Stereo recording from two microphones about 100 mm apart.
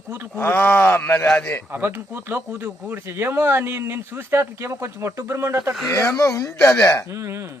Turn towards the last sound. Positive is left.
turn(degrees=-25)  # may be behind; listen again after turning